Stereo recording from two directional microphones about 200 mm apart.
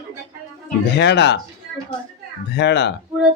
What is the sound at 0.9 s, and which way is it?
Speech, 60° left (ahead or behind).